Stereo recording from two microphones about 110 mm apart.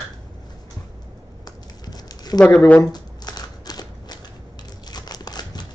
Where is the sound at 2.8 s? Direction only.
40° left (ahead or behind).